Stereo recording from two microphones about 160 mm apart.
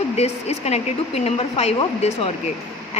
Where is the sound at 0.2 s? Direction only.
40° left (ahead or behind).